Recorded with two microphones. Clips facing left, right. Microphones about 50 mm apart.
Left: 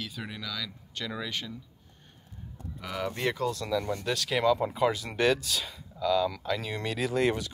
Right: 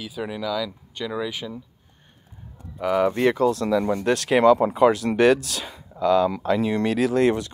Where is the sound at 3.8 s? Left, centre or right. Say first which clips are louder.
Right 9 dB; right.